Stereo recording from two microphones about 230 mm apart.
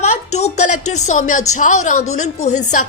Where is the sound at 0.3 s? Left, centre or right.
Left.